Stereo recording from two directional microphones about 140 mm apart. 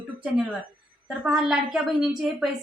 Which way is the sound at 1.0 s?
5° right (ahead or behind).